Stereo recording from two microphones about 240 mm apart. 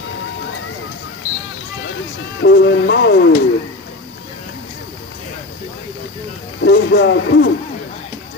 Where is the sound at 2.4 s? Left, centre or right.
Left.